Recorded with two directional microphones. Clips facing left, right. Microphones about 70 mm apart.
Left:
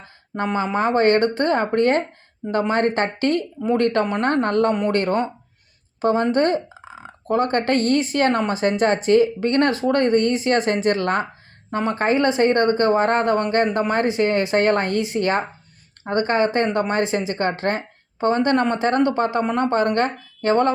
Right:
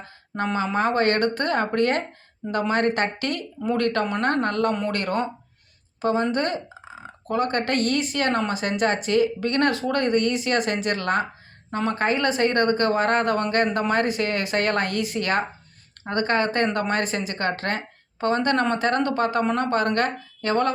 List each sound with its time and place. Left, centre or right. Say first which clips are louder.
0.5 s speech: left 3 dB; left